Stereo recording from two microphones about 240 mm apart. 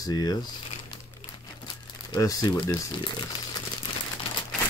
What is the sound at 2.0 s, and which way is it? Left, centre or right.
Speech, centre.